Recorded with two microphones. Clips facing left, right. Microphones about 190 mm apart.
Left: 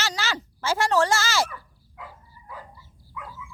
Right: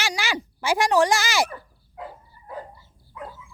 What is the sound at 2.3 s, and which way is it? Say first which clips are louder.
Dog: right 1 dB; 55° right (ahead or behind).